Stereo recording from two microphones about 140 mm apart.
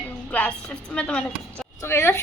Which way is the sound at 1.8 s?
15° left (ahead or behind).